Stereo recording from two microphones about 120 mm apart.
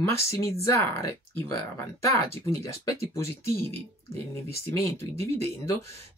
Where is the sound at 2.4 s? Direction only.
25° left (ahead or behind).